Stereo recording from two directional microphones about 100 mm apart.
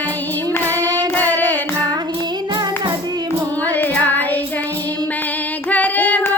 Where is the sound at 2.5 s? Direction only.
45° right (ahead or behind).